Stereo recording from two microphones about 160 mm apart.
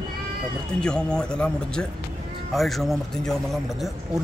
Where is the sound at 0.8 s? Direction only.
5° left (ahead or behind).